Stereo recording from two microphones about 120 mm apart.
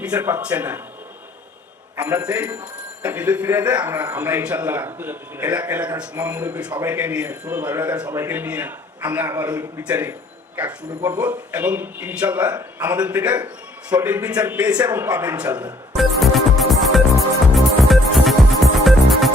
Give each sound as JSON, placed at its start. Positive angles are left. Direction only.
{"t": 0.0, "sound": "a man's voice", "side_deg": -15}
{"t": 2.0, "sound": "a man's voice", "side_deg": -15}
{"t": 16.0, "sound": "music", "side_deg": 0}